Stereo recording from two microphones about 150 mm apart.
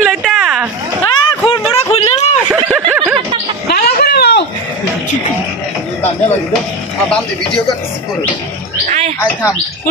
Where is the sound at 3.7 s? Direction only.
90° left.